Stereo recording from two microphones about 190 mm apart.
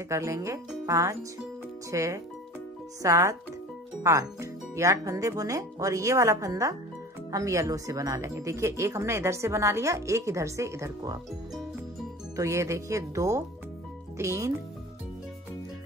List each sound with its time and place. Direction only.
0.1 s speech: 15° right (ahead or behind)
12.4 s speech: 15° right (ahead or behind)